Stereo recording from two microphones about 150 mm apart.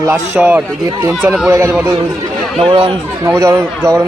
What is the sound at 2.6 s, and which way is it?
Speech, 35° right (ahead or behind).